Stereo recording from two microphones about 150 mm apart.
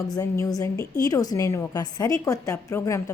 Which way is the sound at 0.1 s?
20° left (ahead or behind).